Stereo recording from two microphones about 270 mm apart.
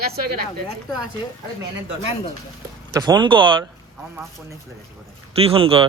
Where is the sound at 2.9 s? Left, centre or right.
Centre.